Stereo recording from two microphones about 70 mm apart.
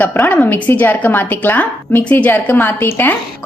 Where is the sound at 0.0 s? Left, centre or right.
Left.